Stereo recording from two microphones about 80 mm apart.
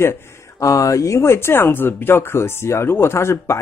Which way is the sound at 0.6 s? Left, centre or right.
Left.